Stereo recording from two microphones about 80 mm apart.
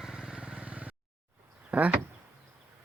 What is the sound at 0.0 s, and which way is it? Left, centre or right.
Vehicle, centre.